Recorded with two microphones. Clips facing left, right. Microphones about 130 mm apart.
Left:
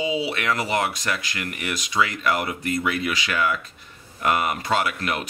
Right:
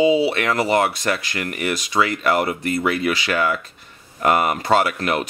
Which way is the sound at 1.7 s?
35° right (ahead or behind).